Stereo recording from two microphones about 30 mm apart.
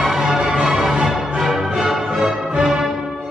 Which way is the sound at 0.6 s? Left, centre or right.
Centre.